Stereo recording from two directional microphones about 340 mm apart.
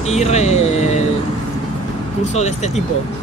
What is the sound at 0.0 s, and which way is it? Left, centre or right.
Speech, centre.